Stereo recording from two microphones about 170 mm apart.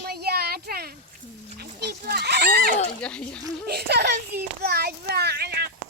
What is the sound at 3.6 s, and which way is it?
Speech, 70° right (ahead or behind).